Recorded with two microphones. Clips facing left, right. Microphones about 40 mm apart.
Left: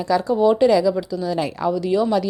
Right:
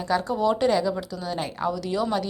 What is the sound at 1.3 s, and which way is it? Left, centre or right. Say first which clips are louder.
Speech: left 5 dB; left.